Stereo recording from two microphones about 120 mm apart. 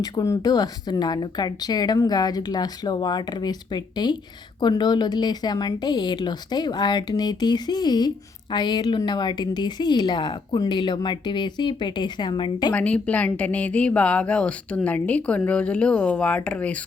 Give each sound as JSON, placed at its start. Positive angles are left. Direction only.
{"t": 0.0, "sound": "speech", "side_deg": 30}
{"t": 12.7, "sound": "a woman's voice", "side_deg": 10}